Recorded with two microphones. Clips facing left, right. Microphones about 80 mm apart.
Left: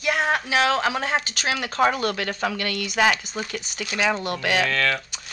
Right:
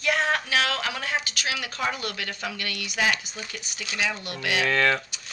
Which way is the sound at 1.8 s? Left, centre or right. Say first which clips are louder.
Left 11 dB; left.